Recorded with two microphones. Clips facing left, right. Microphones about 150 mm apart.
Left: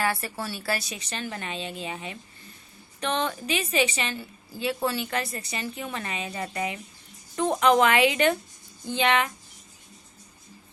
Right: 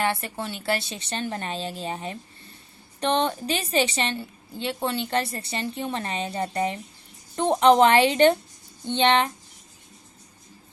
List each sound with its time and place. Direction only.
0.0 s a woman's voice: 25° right (ahead or behind)